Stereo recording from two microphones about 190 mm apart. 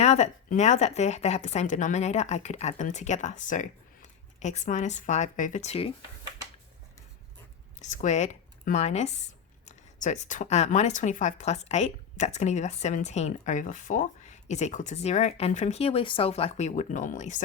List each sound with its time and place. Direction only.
0.0 s speech: 35° left (ahead or behind)
7.8 s speech: 40° left (ahead or behind)